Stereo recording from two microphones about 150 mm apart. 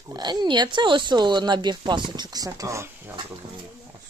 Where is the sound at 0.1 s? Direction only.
30° right (ahead or behind).